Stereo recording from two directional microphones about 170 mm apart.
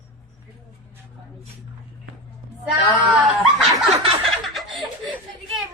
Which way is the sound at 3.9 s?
35° right (ahead or behind).